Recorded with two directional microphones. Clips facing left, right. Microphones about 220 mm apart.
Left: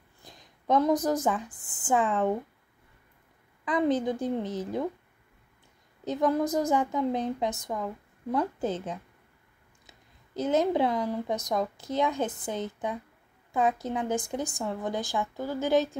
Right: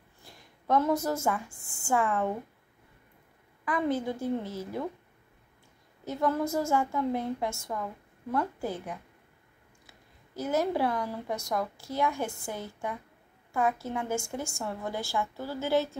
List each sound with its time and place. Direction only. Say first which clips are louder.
0.2 s a woman's voice: left 1 dB; 20° left (ahead or behind)
3.6 s a woman's voice: left 3 dB; 20° left (ahead or behind)
6.0 s a woman's voice: left 3 dB; 15° left (ahead or behind)